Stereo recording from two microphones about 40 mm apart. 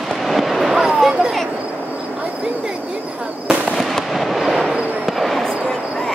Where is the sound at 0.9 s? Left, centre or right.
Centre.